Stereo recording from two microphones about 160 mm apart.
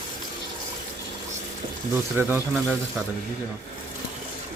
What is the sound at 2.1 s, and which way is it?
Speech, 15° right (ahead or behind).